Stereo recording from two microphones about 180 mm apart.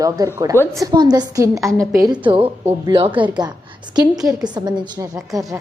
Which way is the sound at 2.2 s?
30° right (ahead or behind).